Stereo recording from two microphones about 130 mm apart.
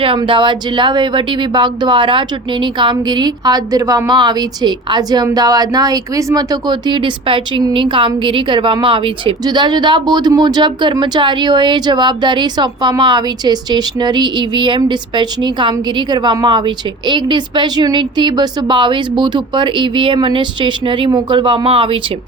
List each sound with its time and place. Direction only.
0.0 s speech: 40° right (ahead or behind)